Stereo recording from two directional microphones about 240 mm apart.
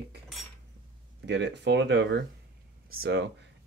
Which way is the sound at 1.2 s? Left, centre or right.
Right.